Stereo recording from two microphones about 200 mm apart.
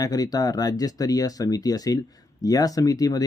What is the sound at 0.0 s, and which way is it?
Speech, 20° left (ahead or behind).